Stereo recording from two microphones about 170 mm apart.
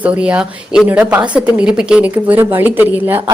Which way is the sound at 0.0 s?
10° right (ahead or behind).